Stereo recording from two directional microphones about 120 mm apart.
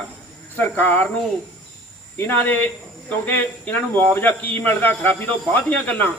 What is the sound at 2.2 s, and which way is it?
Speech, 15° left (ahead or behind).